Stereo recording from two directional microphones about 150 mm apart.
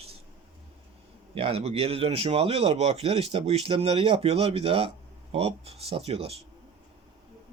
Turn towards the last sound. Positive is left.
turn(degrees=-40)  # may be behind; listen again after turning